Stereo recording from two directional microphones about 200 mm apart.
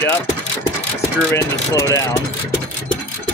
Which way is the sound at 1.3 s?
15° left (ahead or behind).